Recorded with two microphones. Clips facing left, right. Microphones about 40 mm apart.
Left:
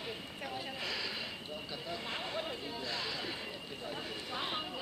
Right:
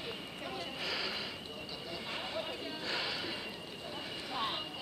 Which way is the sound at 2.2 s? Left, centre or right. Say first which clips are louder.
Even; centre.